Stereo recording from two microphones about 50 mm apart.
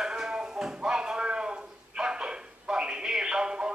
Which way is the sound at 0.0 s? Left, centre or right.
Centre.